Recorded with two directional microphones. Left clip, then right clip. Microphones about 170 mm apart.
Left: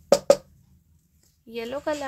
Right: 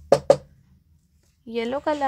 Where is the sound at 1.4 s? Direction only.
20° right (ahead or behind).